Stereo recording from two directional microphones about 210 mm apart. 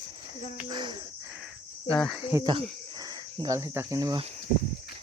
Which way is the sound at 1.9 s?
Centre (ahead or behind).